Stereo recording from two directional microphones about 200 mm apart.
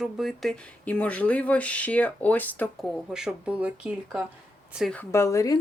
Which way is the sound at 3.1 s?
5° right (ahead or behind).